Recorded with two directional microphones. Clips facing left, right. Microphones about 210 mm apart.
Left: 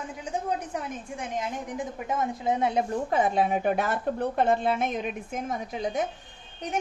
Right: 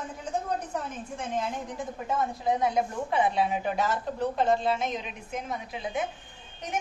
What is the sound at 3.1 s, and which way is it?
A woman's voice, 45° left (ahead or behind).